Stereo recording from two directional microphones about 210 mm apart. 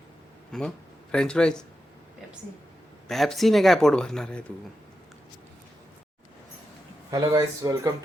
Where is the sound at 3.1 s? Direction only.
Centre (ahead or behind).